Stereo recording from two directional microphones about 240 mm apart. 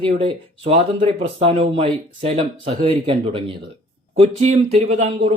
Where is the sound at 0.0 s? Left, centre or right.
Right.